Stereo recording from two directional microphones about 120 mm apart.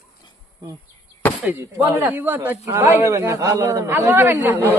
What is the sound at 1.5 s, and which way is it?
A man's voice, 15° right (ahead or behind).